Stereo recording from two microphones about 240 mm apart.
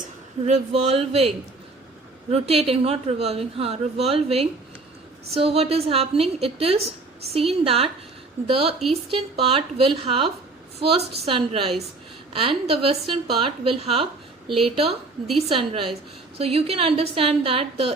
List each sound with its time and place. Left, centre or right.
0.4 s a woman's voice: right
2.3 s a woman's voice: right